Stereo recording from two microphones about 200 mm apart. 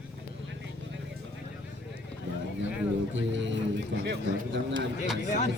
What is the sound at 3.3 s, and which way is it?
Speech, 65° right (ahead or behind).